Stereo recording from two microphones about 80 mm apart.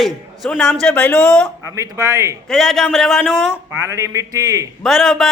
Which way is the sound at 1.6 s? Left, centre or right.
Right.